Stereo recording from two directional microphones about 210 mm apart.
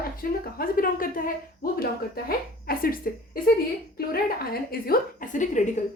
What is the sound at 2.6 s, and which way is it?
A woman's voice, 45° left (ahead or behind).